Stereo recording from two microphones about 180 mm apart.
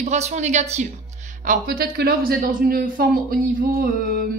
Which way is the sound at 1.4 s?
50° right (ahead or behind).